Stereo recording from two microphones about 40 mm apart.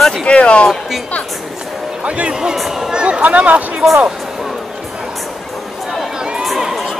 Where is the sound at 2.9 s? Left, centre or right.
Right.